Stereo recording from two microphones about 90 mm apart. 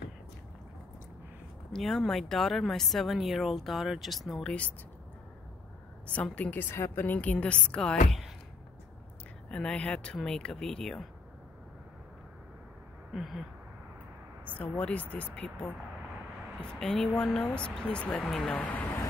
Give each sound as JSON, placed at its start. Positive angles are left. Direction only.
{"t": 1.7, "sound": "speech", "side_deg": 5}
{"t": 6.0, "sound": "a woman's voice", "side_deg": 15}
{"t": 9.5, "sound": "a woman's voice", "side_deg": 10}
{"t": 13.1, "sound": "speech", "side_deg": 0}
{"t": 14.4, "sound": "a woman's voice", "side_deg": 15}
{"t": 18.5, "sound": "speech", "side_deg": 20}